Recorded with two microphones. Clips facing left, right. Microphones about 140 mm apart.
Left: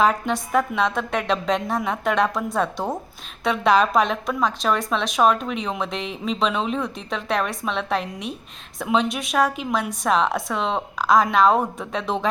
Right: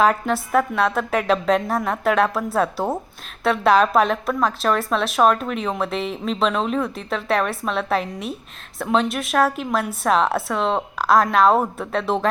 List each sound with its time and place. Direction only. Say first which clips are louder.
0.0 s a woman's voice: right 2 dB; centre (ahead or behind)